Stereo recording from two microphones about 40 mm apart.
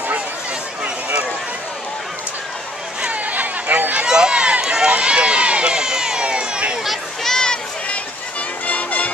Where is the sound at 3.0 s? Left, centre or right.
Right.